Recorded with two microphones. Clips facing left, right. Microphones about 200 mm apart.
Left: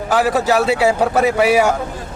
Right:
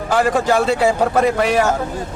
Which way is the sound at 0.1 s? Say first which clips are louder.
Even; 5° left (ahead or behind).